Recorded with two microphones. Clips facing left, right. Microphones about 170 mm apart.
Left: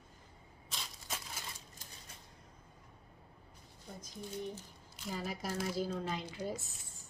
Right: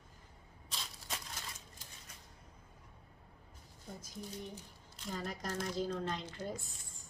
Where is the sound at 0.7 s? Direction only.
Centre (ahead or behind).